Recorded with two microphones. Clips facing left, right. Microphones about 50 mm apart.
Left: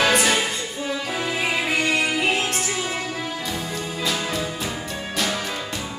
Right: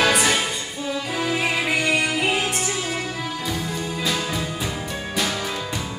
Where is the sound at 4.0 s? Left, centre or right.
Centre.